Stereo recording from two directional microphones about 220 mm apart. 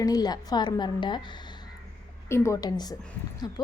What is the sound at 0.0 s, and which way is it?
A woman's voice, 15° left (ahead or behind).